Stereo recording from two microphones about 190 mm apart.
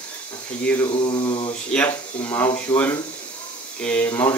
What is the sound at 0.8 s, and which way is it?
Mantra, 30° left (ahead or behind).